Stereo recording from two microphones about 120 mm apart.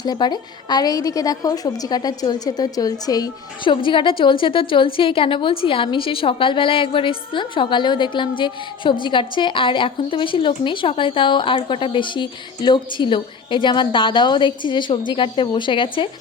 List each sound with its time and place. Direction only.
0.0 s a woman's voice: 35° left (ahead or behind)